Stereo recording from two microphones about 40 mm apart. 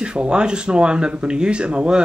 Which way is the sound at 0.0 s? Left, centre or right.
Right.